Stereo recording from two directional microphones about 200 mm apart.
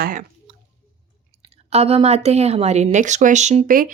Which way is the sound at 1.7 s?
30° right (ahead or behind).